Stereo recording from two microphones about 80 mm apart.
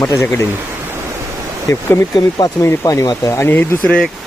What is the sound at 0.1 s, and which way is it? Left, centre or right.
Speech, left.